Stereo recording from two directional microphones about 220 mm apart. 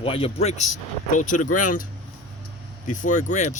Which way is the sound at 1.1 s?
35° left (ahead or behind).